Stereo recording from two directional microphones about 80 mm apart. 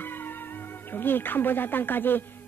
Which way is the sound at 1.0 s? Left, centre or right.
Left.